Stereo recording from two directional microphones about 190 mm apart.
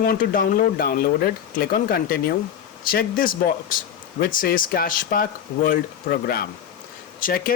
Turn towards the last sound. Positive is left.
turn(degrees=50)  # may be behind; listen again after turning